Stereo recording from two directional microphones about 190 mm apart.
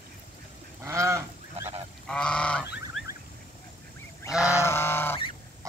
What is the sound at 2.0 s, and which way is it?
Goose, 5° left (ahead or behind).